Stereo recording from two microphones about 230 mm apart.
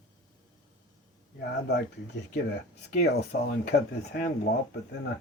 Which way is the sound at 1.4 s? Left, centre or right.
Left.